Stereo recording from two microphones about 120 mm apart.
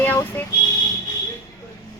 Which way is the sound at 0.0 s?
15° left (ahead or behind).